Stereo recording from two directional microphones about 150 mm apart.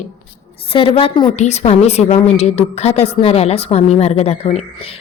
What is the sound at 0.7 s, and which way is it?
Speech, 35° left (ahead or behind).